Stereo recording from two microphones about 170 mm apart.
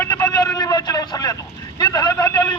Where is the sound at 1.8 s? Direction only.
25° left (ahead or behind).